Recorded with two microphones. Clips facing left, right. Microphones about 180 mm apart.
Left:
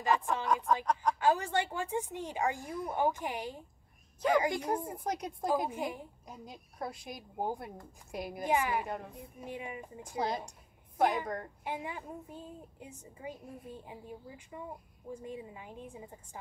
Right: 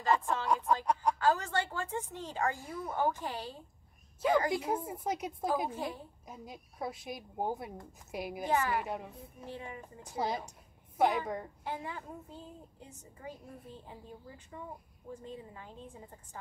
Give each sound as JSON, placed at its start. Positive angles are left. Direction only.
{"t": 0.0, "sound": "a sound", "side_deg": 15}
{"t": 1.1, "sound": "a woman's voice", "side_deg": 15}
{"t": 4.5, "sound": "speech", "side_deg": -5}
{"t": 5.7, "sound": "a woman's voice", "side_deg": 15}
{"t": 6.2, "sound": "speech", "side_deg": 0}
{"t": 8.5, "sound": "a woman's voice", "side_deg": 15}
{"t": 8.8, "sound": "speech", "side_deg": -5}
{"t": 9.4, "sound": "a woman's voice", "side_deg": 15}
{"t": 10.0, "sound": "speech", "side_deg": 0}
{"t": 11.6, "sound": "a woman's voice", "side_deg": 15}